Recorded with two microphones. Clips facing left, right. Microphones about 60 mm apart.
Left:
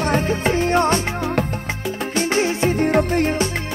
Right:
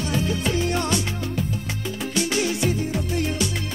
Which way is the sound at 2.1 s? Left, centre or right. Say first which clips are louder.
Left 4 dB; left.